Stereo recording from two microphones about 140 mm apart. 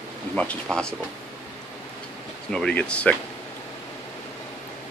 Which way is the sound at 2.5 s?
5° left (ahead or behind).